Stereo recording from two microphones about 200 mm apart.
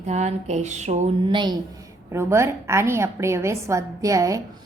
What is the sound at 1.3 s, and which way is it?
A woman's voice, 25° right (ahead or behind).